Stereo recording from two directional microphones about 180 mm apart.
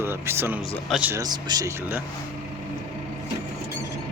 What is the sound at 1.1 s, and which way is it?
Speech, 20° right (ahead or behind).